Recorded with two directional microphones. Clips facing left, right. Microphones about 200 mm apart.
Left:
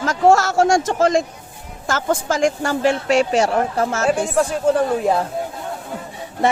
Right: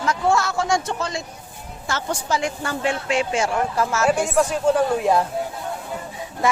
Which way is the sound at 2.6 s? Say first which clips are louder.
Left 6 dB; 40° left (ahead or behind).